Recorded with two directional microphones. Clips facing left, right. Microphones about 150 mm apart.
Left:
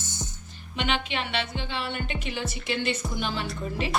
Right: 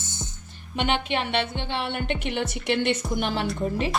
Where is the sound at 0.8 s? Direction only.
55° right (ahead or behind).